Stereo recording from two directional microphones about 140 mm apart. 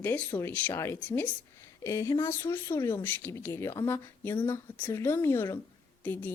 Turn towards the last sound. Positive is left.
turn(degrees=15)  # may be behind; listen again after turning